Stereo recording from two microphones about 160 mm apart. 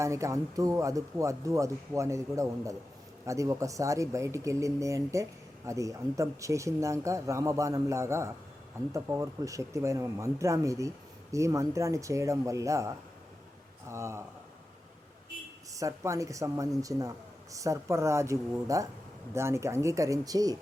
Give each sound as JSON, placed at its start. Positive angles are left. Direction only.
{"t": 0.0, "sound": "speech", "side_deg": -20}
{"t": 15.7, "sound": "speech", "side_deg": -20}